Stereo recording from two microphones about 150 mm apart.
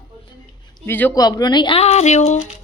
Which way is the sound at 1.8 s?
45° left (ahead or behind).